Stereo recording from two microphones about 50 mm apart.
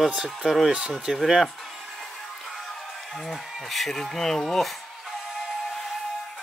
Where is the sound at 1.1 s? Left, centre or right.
Centre.